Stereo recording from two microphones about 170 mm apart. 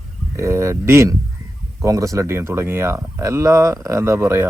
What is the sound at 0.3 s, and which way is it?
Speech, 15° right (ahead or behind).